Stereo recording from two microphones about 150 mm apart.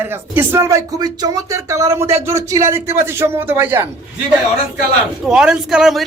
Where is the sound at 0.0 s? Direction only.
15° right (ahead or behind).